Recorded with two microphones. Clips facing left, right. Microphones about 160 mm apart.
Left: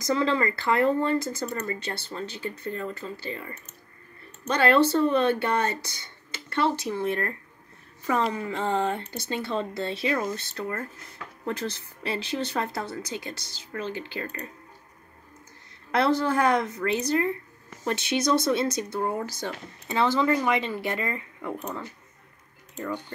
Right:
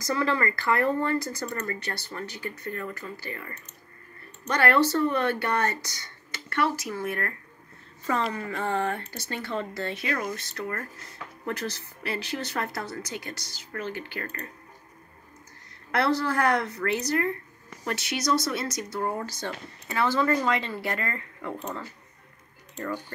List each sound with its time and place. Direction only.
0.0 s speech: 20° left (ahead or behind)
15.9 s speech: 20° left (ahead or behind)
22.8 s speech: 20° left (ahead or behind)